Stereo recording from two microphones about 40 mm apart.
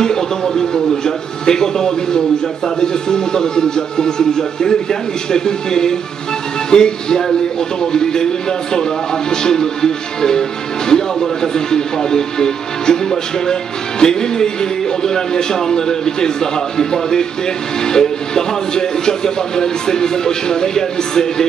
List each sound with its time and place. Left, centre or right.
0.0 s speech: centre